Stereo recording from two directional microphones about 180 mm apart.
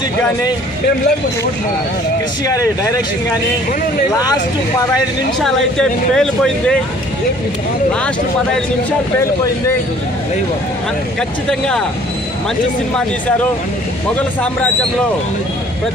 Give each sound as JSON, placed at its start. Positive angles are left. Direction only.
{"t": 2.4, "sound": "speech", "side_deg": 15}
{"t": 5.4, "sound": "speech", "side_deg": 0}
{"t": 11.1, "sound": "speech", "side_deg": 5}